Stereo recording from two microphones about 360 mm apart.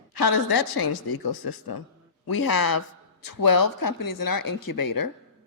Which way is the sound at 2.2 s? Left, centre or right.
Left.